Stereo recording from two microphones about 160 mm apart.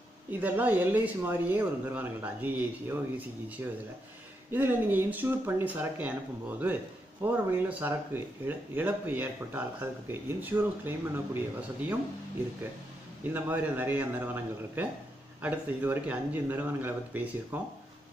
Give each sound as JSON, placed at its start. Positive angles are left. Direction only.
{"t": 0.3, "sound": "speech", "side_deg": -10}
{"t": 7.2, "sound": "speech", "side_deg": -15}
{"t": 13.3, "sound": "speech", "side_deg": -10}